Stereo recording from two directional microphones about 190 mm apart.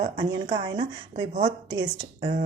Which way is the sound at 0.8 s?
40° right (ahead or behind).